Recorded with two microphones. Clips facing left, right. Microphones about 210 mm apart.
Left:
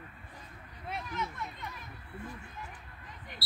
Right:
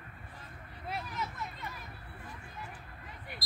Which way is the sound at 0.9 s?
Centre (ahead or behind).